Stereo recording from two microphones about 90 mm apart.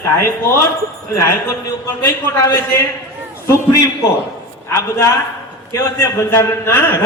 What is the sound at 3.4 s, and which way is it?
A man's voice, 35° left (ahead or behind).